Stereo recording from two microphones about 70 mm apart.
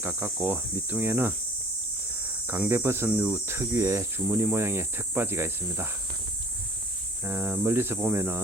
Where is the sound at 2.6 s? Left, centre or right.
Right.